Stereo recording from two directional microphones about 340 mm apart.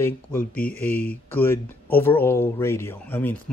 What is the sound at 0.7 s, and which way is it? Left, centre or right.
Speech, centre.